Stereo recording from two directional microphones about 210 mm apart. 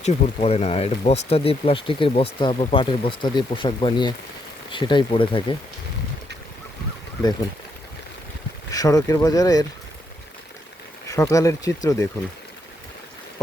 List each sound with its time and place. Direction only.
0.0 s speech: 30° left (ahead or behind)
8.7 s speech: 15° left (ahead or behind)
11.1 s speech: 15° left (ahead or behind)